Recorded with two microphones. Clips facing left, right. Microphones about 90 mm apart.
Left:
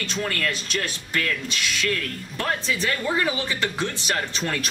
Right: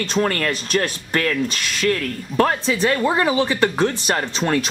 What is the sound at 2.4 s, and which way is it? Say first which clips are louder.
Speech: right 8 dB; 40° right (ahead or behind).